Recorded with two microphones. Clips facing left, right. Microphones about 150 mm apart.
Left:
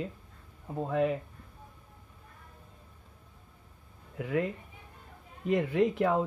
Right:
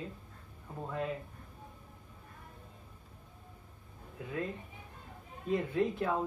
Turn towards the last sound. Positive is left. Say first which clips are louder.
# left 5 dB
turn(degrees=80)